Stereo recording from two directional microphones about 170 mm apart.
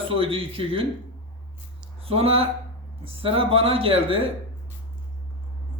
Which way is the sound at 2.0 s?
35° right (ahead or behind).